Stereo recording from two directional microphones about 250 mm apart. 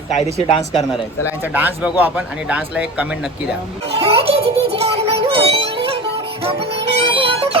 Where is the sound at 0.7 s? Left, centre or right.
Centre.